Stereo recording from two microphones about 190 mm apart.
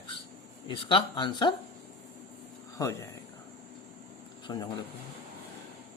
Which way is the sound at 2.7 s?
15° left (ahead or behind).